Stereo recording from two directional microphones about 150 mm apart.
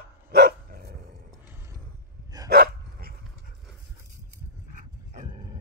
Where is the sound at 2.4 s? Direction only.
90° right.